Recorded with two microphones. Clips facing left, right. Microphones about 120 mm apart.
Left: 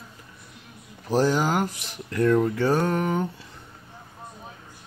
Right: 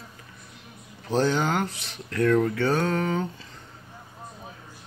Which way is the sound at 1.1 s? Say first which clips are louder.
Left 2 dB; 10° left (ahead or behind).